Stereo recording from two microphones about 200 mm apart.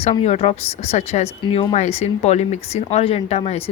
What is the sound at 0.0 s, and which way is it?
Speech, 30° left (ahead or behind).